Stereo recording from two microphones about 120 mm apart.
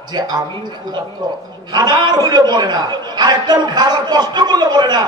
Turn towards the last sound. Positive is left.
turn(degrees=-35)  # may be behind; listen again after turning